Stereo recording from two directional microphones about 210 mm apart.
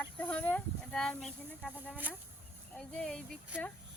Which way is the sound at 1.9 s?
5° right (ahead or behind).